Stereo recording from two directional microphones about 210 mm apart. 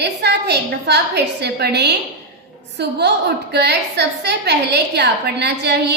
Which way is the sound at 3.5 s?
55° right (ahead or behind).